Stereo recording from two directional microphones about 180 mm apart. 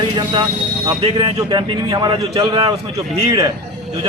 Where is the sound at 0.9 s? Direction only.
25° right (ahead or behind).